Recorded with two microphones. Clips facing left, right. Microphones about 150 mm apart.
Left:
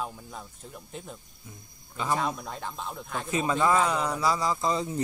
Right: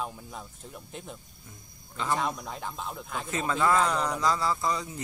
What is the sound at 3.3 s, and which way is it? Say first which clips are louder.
Speech: left 2 dB; 15° left (ahead or behind).